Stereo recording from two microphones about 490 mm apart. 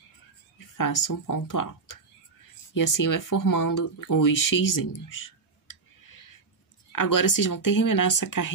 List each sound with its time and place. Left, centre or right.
0.6 s speech: left